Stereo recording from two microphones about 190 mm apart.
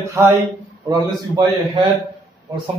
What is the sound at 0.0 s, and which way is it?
A man's voice, 15° right (ahead or behind).